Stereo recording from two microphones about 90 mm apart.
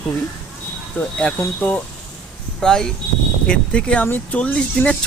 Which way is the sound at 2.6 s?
5° left (ahead or behind).